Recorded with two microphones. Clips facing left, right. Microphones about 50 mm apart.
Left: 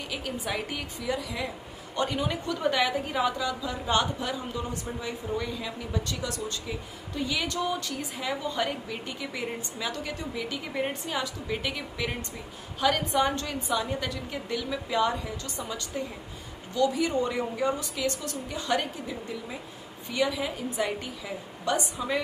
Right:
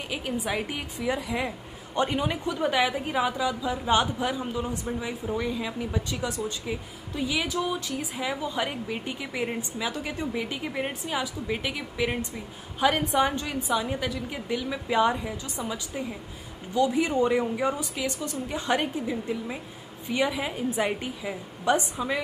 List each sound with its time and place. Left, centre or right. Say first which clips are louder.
0.1 s a woman's voice: right 3 dB; centre
0.9 s a woman's voice: right 4 dB; right
10.7 s a woman's voice: even; centre
16.7 s a woman's voice: right 2 dB; right